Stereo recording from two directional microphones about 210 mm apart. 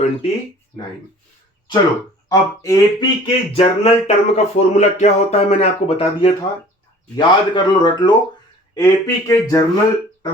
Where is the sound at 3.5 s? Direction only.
30° left (ahead or behind).